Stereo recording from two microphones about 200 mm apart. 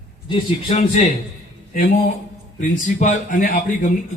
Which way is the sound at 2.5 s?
35° left (ahead or behind).